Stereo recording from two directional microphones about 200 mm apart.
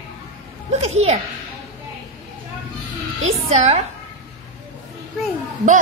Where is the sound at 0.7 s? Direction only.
30° right (ahead or behind).